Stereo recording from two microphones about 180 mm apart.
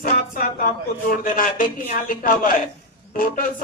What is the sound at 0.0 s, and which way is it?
Speech, 50° left (ahead or behind).